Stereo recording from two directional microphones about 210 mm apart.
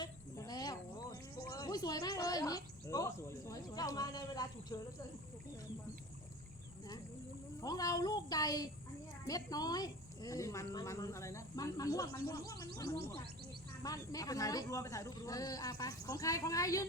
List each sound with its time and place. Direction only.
0.0 s speech: 20° left (ahead or behind)
7.6 s speech: 15° left (ahead or behind)